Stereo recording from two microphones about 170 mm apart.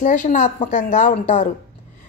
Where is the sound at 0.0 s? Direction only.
50° left (ahead or behind).